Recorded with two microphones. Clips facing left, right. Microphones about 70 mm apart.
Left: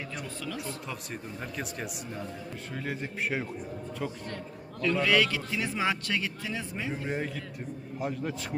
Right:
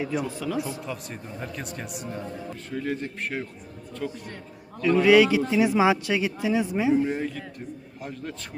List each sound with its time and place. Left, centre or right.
0.0 s speech: centre
4.8 s speech: centre
6.9 s a man's voice: centre